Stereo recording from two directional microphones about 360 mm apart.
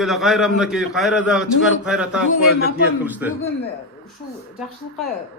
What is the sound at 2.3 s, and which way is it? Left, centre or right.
Speech, left.